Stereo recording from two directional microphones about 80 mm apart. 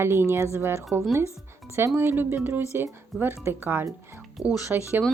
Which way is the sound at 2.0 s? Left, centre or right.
Right.